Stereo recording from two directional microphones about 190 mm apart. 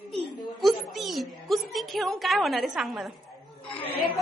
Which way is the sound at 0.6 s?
Centre (ahead or behind).